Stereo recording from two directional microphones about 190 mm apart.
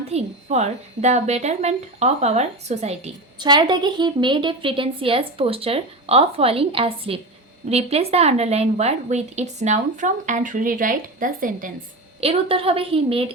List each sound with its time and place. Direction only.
0.1 s a woman's voice: 35° right (ahead or behind)
3.3 s a woman's voice: 25° right (ahead or behind); by 11.7 s 45° right (ahead or behind)
12.2 s a woman's voice: 30° right (ahead or behind)